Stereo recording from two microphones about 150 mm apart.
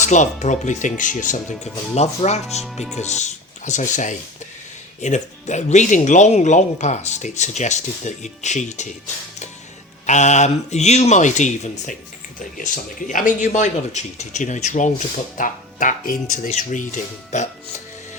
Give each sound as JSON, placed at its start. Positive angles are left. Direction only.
{"t": 0.0, "sound": "speech", "side_deg": 55}
{"t": 10.1, "sound": "speech", "side_deg": 50}